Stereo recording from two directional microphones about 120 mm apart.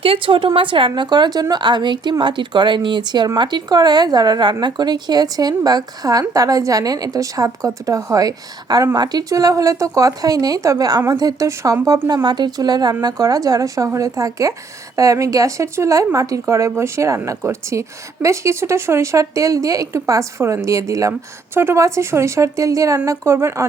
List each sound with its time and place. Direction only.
0.0 s a woman's voice: 50° right (ahead or behind); by 23.6 s 25° right (ahead or behind)